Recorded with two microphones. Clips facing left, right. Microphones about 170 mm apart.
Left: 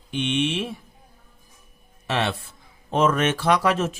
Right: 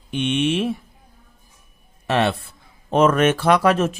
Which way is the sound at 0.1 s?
55° right (ahead or behind).